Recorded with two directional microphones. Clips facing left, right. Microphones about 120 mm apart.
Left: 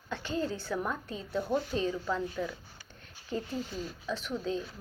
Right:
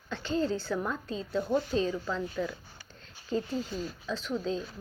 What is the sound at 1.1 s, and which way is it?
Speech, 25° right (ahead or behind).